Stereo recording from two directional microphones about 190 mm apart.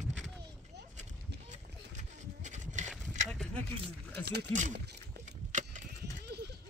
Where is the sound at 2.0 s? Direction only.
40° right (ahead or behind).